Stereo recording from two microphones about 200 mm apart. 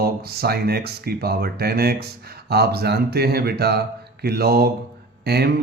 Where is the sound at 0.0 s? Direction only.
50° right (ahead or behind).